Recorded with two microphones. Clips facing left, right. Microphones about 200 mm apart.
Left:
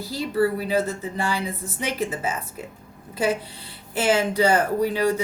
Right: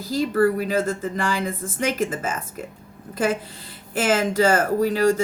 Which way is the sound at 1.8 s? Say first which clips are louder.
Right 3 dB; 50° right (ahead or behind).